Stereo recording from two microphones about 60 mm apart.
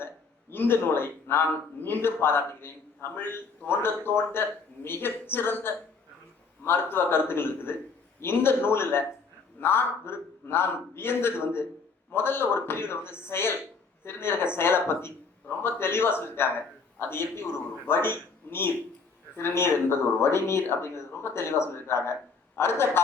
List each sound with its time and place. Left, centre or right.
0.5 s a man's voice: left